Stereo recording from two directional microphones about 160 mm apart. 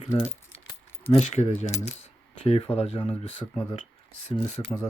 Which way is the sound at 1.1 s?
45° left (ahead or behind).